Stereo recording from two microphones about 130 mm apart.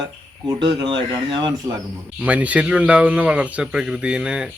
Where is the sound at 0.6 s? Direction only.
40° right (ahead or behind).